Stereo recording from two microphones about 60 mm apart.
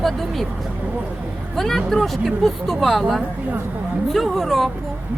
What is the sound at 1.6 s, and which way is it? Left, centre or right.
Speech, centre.